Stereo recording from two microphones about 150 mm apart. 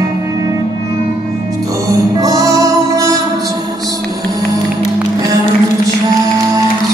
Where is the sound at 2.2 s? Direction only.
20° right (ahead or behind).